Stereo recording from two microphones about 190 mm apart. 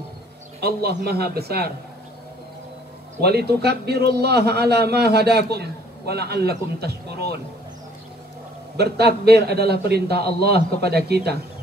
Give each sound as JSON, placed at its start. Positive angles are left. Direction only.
{"t": 0.6, "sound": "a man's voice", "side_deg": -55}
{"t": 3.2, "sound": "a man's voice", "side_deg": -55}
{"t": 8.7, "sound": "a man's voice", "side_deg": -55}